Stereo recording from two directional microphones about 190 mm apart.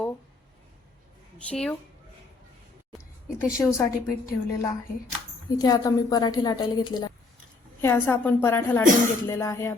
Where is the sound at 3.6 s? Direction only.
10° left (ahead or behind).